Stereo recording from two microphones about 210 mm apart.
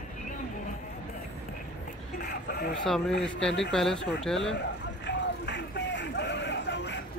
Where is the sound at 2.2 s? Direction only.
50° left (ahead or behind).